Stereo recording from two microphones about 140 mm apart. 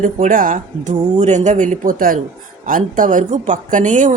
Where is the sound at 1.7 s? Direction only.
80° right.